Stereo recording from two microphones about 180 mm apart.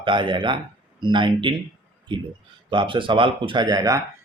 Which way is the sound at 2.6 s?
25° right (ahead or behind).